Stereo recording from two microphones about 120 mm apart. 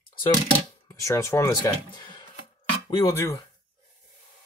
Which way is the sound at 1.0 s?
25° left (ahead or behind).